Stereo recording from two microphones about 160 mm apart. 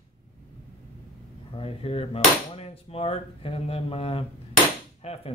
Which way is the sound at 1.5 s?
35° left (ahead or behind).